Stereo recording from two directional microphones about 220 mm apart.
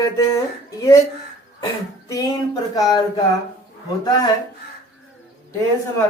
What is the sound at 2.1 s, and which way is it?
Speech, 15° left (ahead or behind).